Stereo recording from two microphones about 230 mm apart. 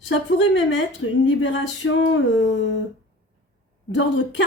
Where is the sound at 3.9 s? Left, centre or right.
Left.